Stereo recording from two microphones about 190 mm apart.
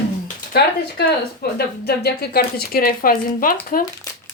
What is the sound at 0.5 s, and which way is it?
Speech, 55° left (ahead or behind).